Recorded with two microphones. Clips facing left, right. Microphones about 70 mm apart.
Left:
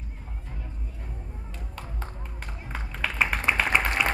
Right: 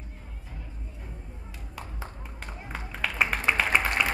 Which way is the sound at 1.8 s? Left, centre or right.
Centre.